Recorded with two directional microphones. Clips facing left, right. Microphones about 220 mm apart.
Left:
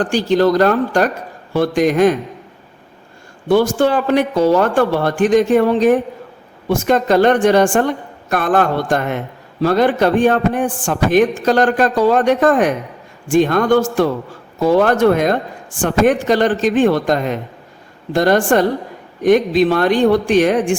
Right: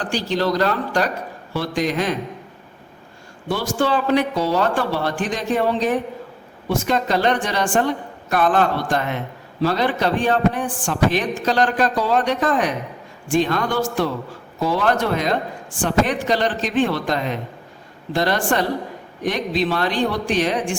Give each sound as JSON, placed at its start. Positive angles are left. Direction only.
{"t": 0.0, "sound": "a man's voice", "side_deg": 50}
{"t": 3.5, "sound": "a man's voice", "side_deg": 50}